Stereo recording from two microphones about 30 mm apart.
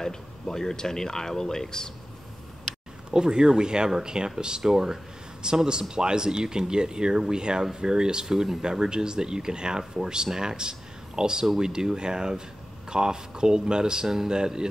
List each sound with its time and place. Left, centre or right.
0.0 s speech: centre
3.1 s speech: right
4.6 s speech: centre
5.4 s speech: right
14.0 s speech: centre